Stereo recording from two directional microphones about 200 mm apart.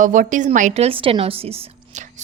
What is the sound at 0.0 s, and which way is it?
A woman's voice, 40° right (ahead or behind).